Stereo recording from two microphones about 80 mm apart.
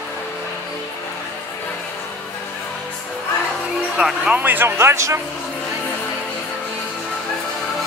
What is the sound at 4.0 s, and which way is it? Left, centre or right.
Speech, centre.